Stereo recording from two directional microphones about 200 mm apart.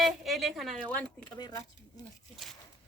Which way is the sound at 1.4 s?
20° left (ahead or behind).